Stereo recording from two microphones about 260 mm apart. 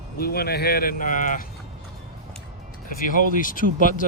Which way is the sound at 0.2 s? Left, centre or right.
Left.